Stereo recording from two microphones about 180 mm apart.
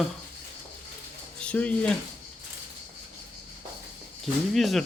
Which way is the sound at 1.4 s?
5° left (ahead or behind).